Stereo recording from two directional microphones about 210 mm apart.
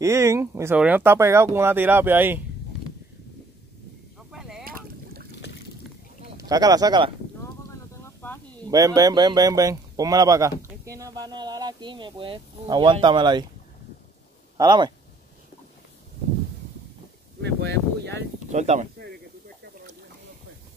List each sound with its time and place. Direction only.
0.0 s speech: 15° right (ahead or behind)
4.3 s a sound: centre (ahead or behind)
4.6 s boat: 45° right (ahead or behind)
6.3 s speech: 15° right (ahead or behind)
8.6 s speech: 15° right (ahead or behind)
14.6 s speech: 20° right (ahead or behind)
17.4 s speech: 55° right (ahead or behind)
18.5 s speech: 35° right (ahead or behind)